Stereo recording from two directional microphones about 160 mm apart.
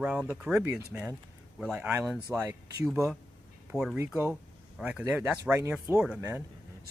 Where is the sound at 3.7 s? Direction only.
5° right (ahead or behind).